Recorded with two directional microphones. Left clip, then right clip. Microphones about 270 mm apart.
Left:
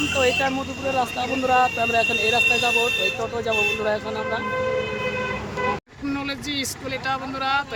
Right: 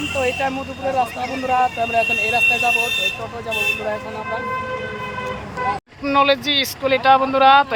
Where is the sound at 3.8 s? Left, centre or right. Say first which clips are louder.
Left 1 dB; centre.